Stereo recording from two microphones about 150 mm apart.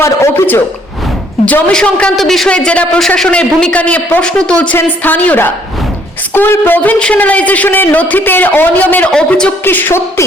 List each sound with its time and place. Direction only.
0.0 s a man's voice: 15° left (ahead or behind)